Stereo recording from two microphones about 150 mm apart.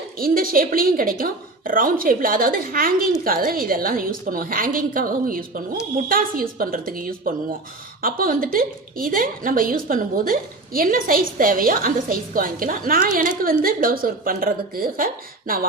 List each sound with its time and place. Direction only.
0.2 s a woman's voice: 70° right (ahead or behind)